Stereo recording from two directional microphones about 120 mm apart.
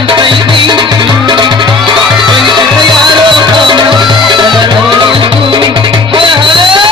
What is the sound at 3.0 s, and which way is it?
Music, 40° right (ahead or behind).